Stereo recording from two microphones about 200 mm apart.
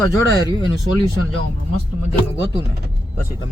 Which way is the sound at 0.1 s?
15° left (ahead or behind).